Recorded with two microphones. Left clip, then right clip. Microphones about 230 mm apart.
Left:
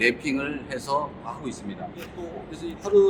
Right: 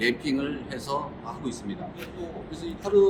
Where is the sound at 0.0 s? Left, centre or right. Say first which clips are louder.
Left 3 dB; centre.